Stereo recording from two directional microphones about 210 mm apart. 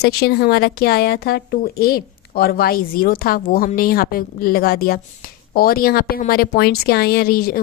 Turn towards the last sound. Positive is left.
turn(degrees=45)  # may be behind; listen again after turning